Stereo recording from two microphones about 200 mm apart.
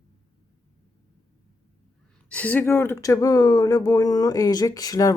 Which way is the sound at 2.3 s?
10° left (ahead or behind).